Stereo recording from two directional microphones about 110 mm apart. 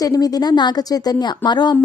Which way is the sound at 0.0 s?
35° left (ahead or behind).